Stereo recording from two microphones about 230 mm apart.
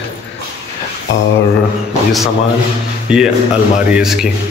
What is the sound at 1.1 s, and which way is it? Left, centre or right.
Speech, left.